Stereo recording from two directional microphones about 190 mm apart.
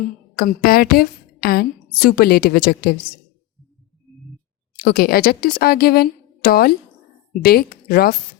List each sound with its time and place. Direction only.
0.3 s a woman's voice: 50° left (ahead or behind)
4.8 s a woman's voice: 55° left (ahead or behind)